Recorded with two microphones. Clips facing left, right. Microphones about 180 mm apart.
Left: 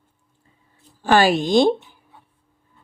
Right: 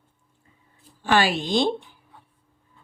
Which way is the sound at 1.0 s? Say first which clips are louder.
Left 5 dB; 45° left (ahead or behind).